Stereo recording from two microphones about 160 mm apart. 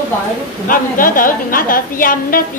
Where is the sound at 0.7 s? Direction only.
60° left (ahead or behind).